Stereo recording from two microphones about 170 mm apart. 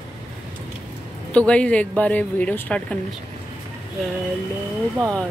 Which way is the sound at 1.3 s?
5° left (ahead or behind).